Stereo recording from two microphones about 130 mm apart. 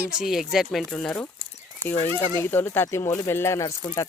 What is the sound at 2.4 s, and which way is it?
Speech, 15° left (ahead or behind).